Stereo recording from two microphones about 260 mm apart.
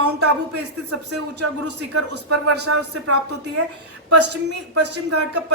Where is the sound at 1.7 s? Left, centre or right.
Right.